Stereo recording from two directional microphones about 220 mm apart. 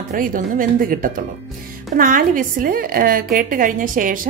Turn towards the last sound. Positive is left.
turn(degrees=-40)  # may be behind; listen again after turning